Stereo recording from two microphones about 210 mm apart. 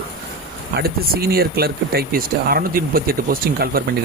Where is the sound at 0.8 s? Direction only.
45° right (ahead or behind).